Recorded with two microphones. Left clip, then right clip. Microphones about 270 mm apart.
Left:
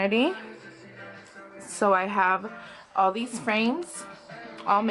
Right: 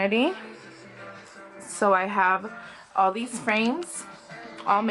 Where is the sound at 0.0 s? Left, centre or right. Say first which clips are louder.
Right 1 dB; centre.